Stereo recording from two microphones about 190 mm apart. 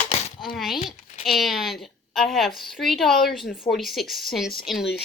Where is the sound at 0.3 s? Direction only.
Centre (ahead or behind).